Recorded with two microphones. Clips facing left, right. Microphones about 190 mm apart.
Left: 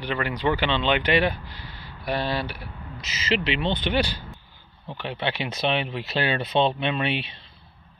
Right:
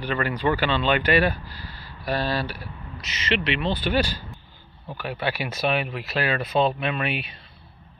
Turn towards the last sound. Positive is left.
turn(degrees=30)  # may be behind; listen again after turning